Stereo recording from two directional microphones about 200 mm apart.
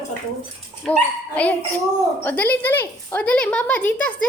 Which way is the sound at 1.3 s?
5° left (ahead or behind).